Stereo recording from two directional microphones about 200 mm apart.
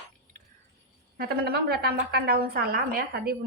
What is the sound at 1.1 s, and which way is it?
A woman's voice, 50° right (ahead or behind).